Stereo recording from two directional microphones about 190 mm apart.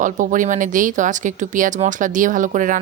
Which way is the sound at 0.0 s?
45° right (ahead or behind).